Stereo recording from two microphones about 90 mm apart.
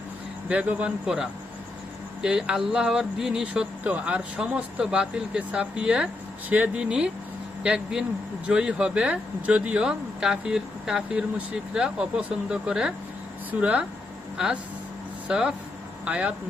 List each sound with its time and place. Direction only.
0.4 s speech: 15° right (ahead or behind)
1.0 s speech: 5° right (ahead or behind)